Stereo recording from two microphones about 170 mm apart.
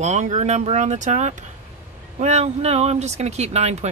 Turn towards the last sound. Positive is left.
turn(degrees=-40)  # may be behind; listen again after turning